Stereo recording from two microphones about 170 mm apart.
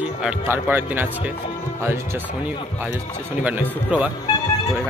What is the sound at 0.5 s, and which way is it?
Speech, 10° right (ahead or behind).